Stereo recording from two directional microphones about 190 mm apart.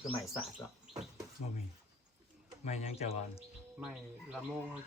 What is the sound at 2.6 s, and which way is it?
Speech, 35° left (ahead or behind).